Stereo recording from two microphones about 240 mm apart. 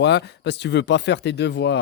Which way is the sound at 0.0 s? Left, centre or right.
Left.